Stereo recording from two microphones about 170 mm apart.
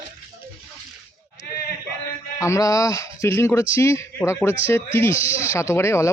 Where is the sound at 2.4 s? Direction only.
20° left (ahead or behind).